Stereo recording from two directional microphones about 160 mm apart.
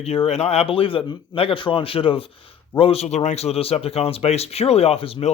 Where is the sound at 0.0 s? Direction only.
40° left (ahead or behind).